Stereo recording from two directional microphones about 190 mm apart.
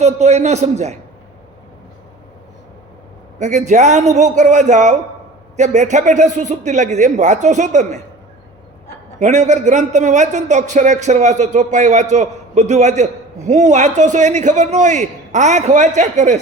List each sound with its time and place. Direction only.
0.0 s a man's voice: 35° right (ahead or behind)
3.3 s a man's voice: 40° right (ahead or behind)
9.1 s a man's voice: 40° right (ahead or behind)